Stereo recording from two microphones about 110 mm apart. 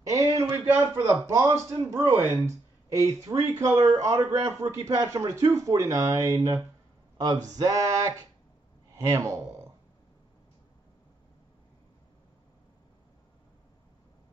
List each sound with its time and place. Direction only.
0.1 s a man's voice: 30° right (ahead or behind)
6.0 s a sound: 35° right (ahead or behind)
9.0 s speech: 30° right (ahead or behind)